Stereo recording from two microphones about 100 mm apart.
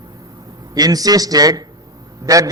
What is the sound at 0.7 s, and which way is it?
Speech, 40° right (ahead or behind).